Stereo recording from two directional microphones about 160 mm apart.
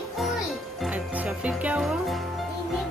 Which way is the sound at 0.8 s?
10° right (ahead or behind).